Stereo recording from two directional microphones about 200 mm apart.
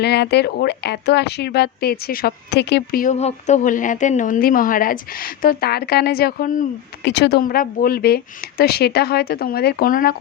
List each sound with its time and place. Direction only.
0.0 s speech: 55° left (ahead or behind)
7.0 s speech: 60° left (ahead or behind)